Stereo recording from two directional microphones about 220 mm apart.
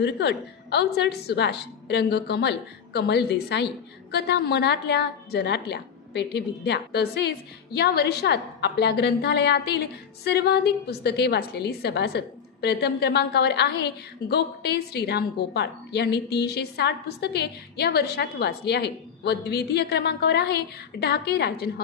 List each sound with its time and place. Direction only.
0.0 s a woman's voice: 50° left (ahead or behind)